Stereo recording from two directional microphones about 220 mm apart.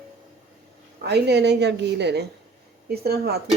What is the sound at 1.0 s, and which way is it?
Speech, 50° right (ahead or behind).